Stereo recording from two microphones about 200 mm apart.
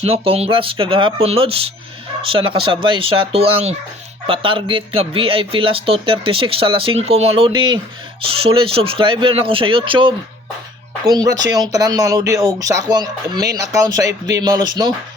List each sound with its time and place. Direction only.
0.0 s speech: 30° right (ahead or behind)